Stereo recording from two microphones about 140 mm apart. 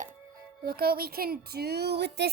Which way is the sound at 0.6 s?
90° right.